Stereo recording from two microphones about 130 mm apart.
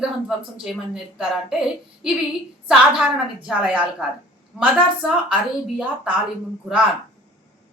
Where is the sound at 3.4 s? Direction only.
10° right (ahead or behind).